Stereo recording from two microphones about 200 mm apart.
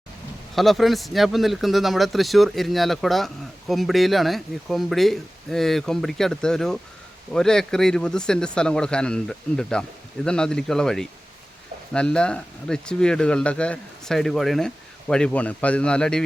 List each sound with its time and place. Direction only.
0.5 s speech: centre (ahead or behind)